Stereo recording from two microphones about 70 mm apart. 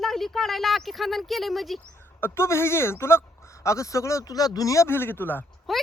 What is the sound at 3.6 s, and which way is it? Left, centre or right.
Speech, left.